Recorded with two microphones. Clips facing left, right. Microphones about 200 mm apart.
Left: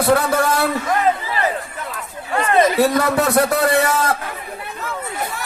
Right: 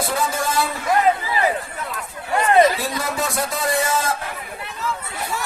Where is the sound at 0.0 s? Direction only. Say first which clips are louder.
Left 7 dB; 65° left (ahead or behind).